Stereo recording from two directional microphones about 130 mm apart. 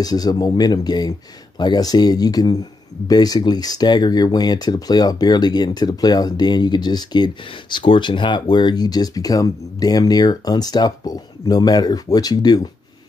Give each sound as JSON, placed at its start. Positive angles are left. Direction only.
{"t": 0.0, "sound": "speech", "side_deg": 30}